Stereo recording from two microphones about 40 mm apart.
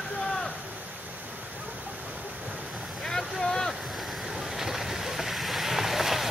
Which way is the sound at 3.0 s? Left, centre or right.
Centre.